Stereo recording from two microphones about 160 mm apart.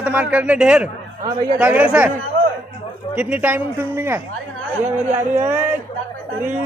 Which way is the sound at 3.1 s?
10° right (ahead or behind).